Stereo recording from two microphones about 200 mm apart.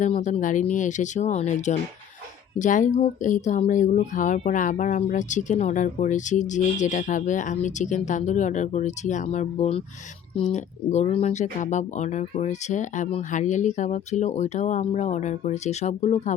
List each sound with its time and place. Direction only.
0.0 s speech: 35° left (ahead or behind)